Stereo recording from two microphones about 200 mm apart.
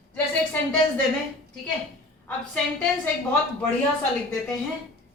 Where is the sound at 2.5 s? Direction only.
10° left (ahead or behind).